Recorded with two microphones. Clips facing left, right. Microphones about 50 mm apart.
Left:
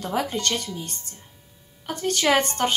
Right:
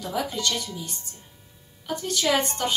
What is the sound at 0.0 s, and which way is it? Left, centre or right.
Speech, left.